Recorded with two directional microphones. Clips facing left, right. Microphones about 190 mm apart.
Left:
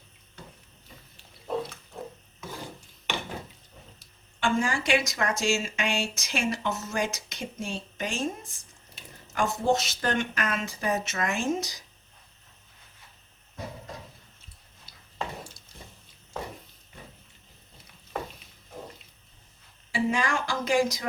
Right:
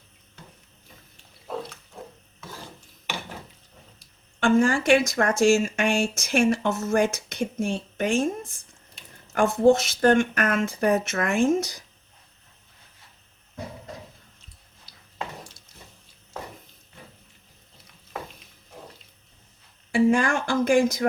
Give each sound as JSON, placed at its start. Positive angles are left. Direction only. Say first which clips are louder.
{"t": 4.4, "sound": "speech", "louder": "right 7 dB", "side_deg": -50}
{"t": 9.3, "sound": "speech", "louder": "right 7 dB", "side_deg": -55}
{"t": 19.9, "sound": "a sound", "louder": "right 7 dB", "side_deg": -50}